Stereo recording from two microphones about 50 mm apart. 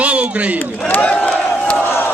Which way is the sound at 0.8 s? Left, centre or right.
Left.